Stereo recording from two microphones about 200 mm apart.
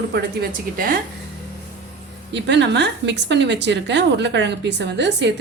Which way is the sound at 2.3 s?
60° right (ahead or behind).